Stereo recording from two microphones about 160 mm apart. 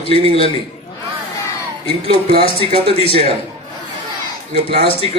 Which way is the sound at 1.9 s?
35° left (ahead or behind).